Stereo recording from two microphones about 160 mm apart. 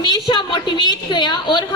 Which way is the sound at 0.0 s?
30° left (ahead or behind).